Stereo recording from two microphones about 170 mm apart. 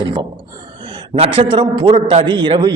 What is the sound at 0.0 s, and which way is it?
A man's voice, 25° right (ahead or behind).